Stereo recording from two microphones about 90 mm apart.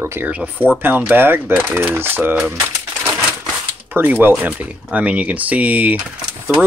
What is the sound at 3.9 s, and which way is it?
Speech, 20° right (ahead or behind).